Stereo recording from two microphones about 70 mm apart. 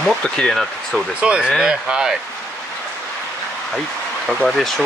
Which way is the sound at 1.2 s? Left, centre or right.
Centre.